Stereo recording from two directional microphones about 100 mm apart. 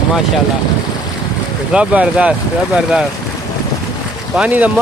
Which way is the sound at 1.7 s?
10° right (ahead or behind).